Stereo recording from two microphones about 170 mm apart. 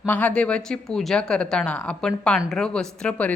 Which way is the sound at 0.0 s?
10° left (ahead or behind).